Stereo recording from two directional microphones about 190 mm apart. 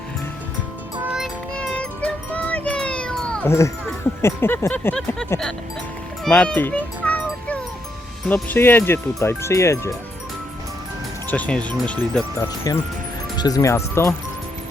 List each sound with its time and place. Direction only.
1.0 s music: 5° right (ahead or behind); by 3.7 s 15° left (ahead or behind)
4.2 s speech: 10° left (ahead or behind)
6.2 s music: 5° left (ahead or behind)
8.3 s speech: 10° left (ahead or behind)
11.3 s speech: 5° left (ahead or behind)
12.7 s speech: 20° left (ahead or behind)